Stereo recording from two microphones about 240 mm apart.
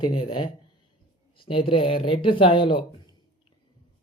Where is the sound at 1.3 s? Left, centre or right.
Left.